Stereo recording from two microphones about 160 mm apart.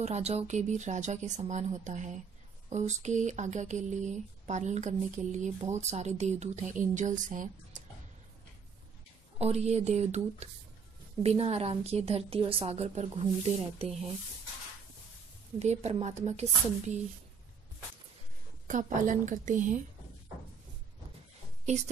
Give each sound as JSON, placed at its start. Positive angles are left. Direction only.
{"t": 0.0, "sound": "speech", "side_deg": -40}
{"t": 9.4, "sound": "a woman's voice", "side_deg": -40}
{"t": 15.6, "sound": "speech", "side_deg": -45}
{"t": 18.7, "sound": "speech", "side_deg": -50}
{"t": 21.7, "sound": "speech", "side_deg": -45}